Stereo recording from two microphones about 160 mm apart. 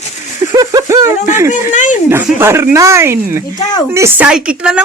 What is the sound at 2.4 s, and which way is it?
Speech, 15° right (ahead or behind).